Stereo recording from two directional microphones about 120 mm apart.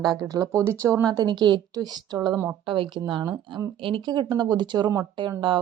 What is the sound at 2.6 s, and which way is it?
A woman's voice, 45° right (ahead or behind).